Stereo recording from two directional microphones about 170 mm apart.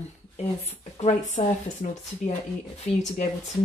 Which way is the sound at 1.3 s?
45° left (ahead or behind).